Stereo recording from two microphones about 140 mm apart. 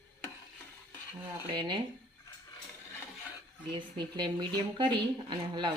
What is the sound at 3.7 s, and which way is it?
Speech, 30° right (ahead or behind).